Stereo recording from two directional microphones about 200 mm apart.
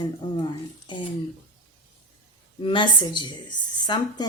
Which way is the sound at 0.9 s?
25° left (ahead or behind).